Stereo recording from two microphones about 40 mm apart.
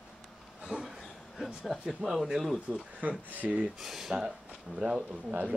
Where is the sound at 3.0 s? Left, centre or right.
Right.